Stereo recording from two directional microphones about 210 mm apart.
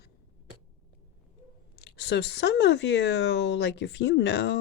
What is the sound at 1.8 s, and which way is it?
Speech, 55° left (ahead or behind).